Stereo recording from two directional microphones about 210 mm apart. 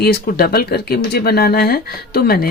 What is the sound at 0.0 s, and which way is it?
Speech, 45° left (ahead or behind).